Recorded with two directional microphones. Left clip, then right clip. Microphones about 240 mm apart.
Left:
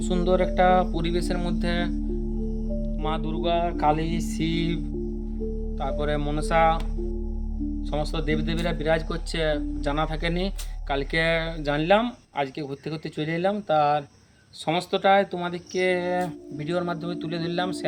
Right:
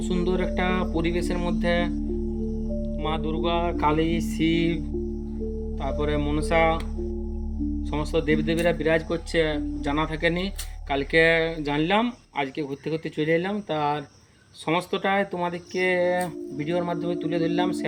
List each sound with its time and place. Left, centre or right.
0.0 s speech: centre
5.8 s speech: centre
7.9 s speech: centre